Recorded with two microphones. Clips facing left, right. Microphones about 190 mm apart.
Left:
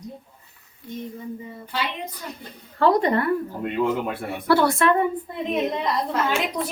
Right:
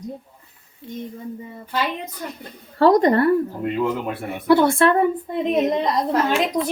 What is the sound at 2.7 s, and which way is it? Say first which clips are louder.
Speech: right 4 dB; 40° right (ahead or behind).